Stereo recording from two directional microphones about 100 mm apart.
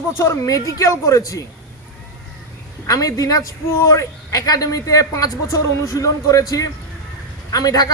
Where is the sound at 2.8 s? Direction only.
35° left (ahead or behind).